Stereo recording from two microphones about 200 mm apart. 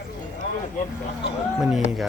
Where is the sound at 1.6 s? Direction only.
Centre (ahead or behind).